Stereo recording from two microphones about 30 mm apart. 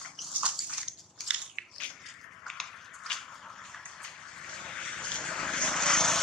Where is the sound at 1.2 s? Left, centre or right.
Right.